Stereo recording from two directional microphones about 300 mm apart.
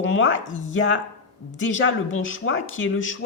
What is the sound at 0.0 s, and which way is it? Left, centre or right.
A man's voice, left.